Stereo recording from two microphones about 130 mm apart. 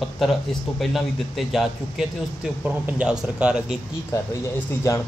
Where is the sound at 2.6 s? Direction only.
10° right (ahead or behind).